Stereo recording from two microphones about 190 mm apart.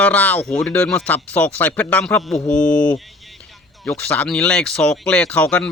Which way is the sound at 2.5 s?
5° left (ahead or behind).